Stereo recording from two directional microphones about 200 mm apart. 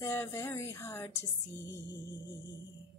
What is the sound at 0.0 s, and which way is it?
Female singing, 15° left (ahead or behind).